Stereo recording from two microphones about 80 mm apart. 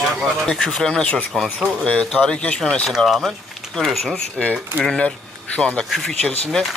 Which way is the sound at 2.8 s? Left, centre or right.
Centre.